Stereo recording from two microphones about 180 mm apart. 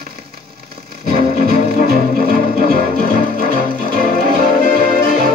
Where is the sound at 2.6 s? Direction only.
55° right (ahead or behind).